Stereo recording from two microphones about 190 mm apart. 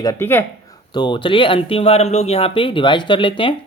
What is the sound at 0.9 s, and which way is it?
Speech, 25° left (ahead or behind).